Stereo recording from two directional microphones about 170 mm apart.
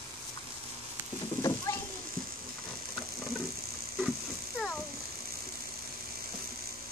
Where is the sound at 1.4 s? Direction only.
25° left (ahead or behind).